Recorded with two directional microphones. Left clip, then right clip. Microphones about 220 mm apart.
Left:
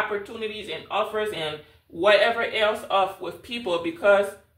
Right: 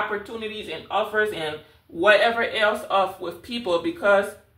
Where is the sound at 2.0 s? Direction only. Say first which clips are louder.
Right 1 dB; 10° right (ahead or behind).